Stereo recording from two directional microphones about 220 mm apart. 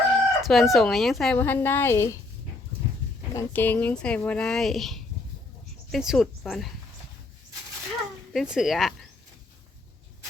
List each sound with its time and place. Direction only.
0.1 s speech: centre (ahead or behind)
3.3 s speech: 10° left (ahead or behind)
8.3 s speech: centre (ahead or behind)